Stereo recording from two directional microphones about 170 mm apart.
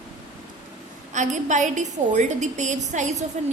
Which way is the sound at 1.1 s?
45° right (ahead or behind).